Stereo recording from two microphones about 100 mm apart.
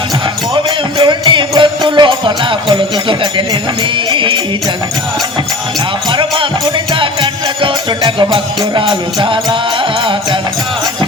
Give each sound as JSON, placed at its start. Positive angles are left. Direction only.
{"t": 0.5, "sound": "music", "side_deg": -55}
{"t": 6.1, "sound": "music", "side_deg": -60}